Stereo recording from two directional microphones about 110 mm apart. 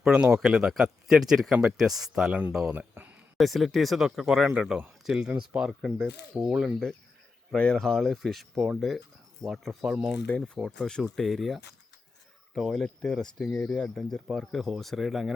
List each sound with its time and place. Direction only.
0.0 s speech: 5° right (ahead or behind)
2.7 s a sound: 15° right (ahead or behind)
3.3 s speech: centre (ahead or behind)
7.5 s speech: 5° left (ahead or behind)
10.2 s speech: 10° left (ahead or behind)